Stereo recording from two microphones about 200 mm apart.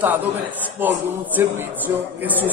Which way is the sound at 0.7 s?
10° right (ahead or behind).